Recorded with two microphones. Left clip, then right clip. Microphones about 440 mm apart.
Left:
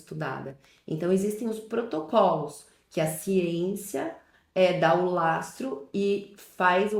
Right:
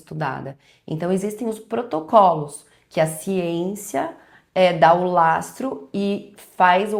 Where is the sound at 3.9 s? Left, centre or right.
Right.